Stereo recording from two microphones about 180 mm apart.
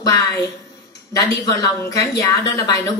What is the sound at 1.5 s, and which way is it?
Speech, 15° left (ahead or behind).